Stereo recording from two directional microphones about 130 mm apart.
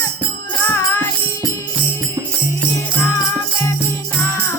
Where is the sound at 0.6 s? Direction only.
15° left (ahead or behind).